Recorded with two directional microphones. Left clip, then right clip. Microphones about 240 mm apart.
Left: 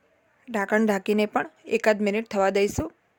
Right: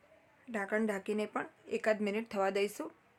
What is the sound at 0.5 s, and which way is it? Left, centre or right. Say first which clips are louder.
Speech: left 11 dB; left.